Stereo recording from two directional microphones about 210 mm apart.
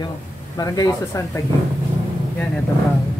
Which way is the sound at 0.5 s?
15° left (ahead or behind).